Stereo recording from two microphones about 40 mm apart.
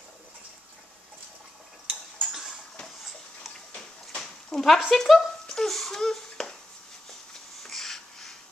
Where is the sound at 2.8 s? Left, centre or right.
Centre.